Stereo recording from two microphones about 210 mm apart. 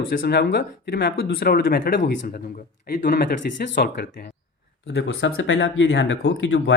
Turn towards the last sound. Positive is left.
turn(degrees=55)  # may be behind; listen again after turning